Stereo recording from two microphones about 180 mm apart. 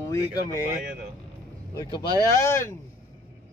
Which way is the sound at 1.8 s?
15° left (ahead or behind).